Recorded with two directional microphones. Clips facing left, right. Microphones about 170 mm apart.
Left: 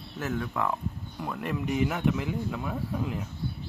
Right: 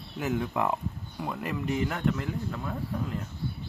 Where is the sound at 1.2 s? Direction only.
5° right (ahead or behind).